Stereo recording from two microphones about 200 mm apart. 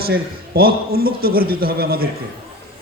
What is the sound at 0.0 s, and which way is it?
A man's voice, 50° right (ahead or behind).